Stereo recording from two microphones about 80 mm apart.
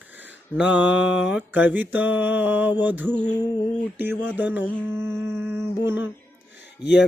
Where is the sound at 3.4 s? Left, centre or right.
Left.